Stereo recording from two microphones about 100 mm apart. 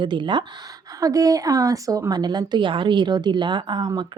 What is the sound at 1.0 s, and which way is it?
Speech, 35° right (ahead or behind).